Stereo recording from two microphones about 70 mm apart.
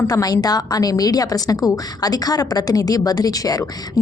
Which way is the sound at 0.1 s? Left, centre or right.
Left.